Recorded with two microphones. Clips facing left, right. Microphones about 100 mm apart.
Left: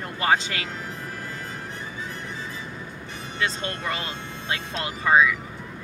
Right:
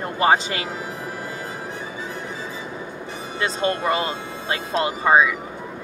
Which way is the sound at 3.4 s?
5° right (ahead or behind).